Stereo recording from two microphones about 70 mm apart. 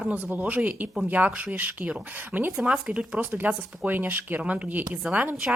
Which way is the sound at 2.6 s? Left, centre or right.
Centre.